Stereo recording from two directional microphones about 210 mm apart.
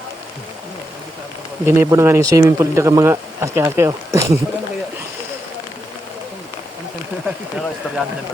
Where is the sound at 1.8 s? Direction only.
15° right (ahead or behind).